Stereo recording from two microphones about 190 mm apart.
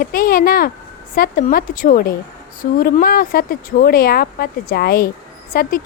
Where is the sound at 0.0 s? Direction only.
50° left (ahead or behind).